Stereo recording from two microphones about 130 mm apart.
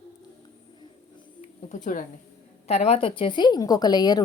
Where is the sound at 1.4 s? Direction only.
75° left (ahead or behind).